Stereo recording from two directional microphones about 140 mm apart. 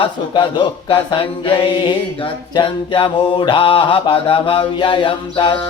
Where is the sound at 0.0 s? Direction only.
40° left (ahead or behind).